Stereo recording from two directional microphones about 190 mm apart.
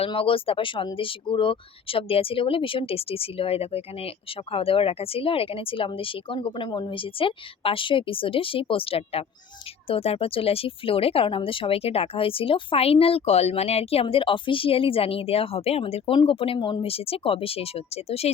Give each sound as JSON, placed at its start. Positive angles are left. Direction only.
{"t": 0.0, "sound": "speech", "side_deg": 30}